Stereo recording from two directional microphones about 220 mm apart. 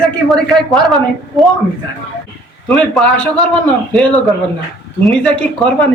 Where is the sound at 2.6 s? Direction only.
5° left (ahead or behind).